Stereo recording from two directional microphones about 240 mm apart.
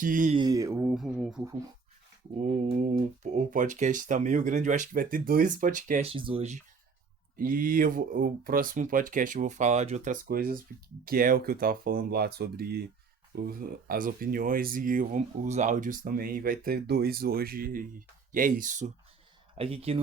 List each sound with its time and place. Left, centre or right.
0.0 s speech: right
0.3 s speech: centre
2.4 s mantra: right
3.3 s speech: right
7.3 s speech: right
19.5 s mantra: right